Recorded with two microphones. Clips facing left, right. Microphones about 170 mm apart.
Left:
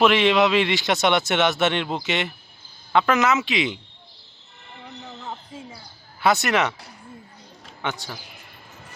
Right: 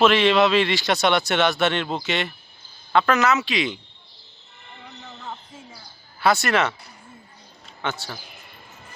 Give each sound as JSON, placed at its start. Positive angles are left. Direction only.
{"t": 0.0, "sound": "a man's voice", "side_deg": 15}
{"t": 6.2, "sound": "a man's voice", "side_deg": 20}
{"t": 7.8, "sound": "a man's voice", "side_deg": 15}